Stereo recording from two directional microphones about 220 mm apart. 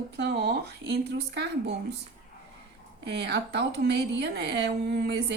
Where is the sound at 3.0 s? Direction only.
50° right (ahead or behind).